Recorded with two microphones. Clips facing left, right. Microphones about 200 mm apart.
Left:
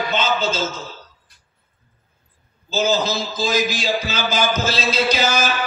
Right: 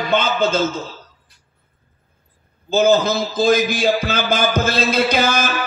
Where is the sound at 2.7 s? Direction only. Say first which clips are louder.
Right 5 dB; 55° right (ahead or behind).